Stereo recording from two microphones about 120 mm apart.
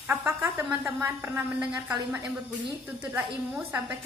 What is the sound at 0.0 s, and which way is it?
A woman's voice, 15° right (ahead or behind).